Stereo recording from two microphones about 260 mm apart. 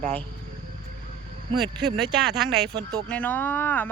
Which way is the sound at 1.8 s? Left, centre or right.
Centre.